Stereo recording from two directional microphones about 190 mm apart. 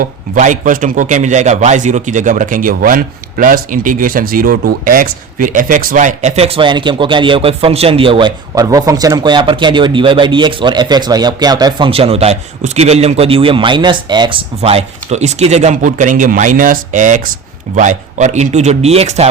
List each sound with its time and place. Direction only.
0.0 s a man's voice: 40° right (ahead or behind)